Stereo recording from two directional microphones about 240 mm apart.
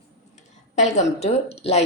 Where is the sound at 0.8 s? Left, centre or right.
Left.